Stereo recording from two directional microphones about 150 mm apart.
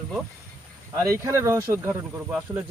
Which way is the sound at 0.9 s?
20° right (ahead or behind).